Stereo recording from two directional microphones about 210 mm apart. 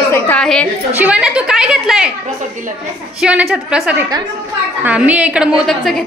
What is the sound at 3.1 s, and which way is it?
A woman's voice, 5° right (ahead or behind).